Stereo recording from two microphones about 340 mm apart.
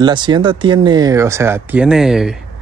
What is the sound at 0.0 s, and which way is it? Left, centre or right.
Speech, centre.